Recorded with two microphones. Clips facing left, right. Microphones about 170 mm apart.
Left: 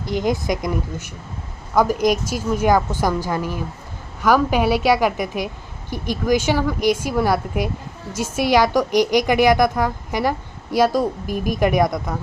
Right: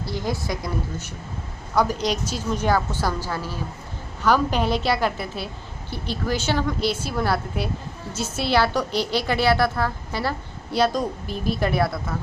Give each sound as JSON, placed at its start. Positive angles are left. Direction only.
{"t": 0.0, "sound": "a woman's voice", "side_deg": 20}